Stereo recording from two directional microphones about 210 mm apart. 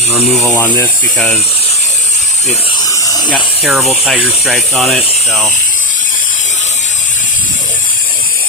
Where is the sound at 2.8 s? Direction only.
15° left (ahead or behind).